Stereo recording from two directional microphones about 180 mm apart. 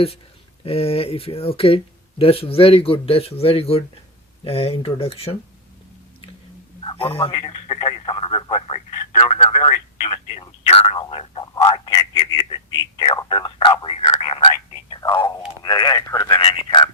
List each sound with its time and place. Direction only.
0.6 s speech: 35° left (ahead or behind)
6.8 s radio: 30° left (ahead or behind)
9.2 s telephone: 35° left (ahead or behind)
12.4 s speech: 25° left (ahead or behind)
14.8 s a sound: 25° left (ahead or behind)
15.6 s speech: 20° left (ahead or behind)